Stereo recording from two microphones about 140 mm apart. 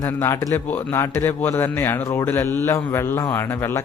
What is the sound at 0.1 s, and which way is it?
A man's voice, 20° left (ahead or behind).